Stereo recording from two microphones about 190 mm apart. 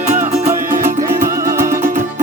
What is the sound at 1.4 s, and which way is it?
Music, 15° right (ahead or behind).